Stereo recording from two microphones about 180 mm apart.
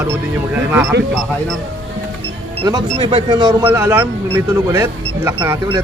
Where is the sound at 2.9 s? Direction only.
35° right (ahead or behind).